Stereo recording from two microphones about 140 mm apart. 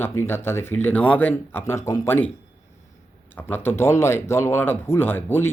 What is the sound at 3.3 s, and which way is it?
Speech, 15° left (ahead or behind).